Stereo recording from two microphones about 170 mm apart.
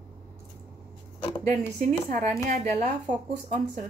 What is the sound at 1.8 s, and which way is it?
Speech, 45° right (ahead or behind).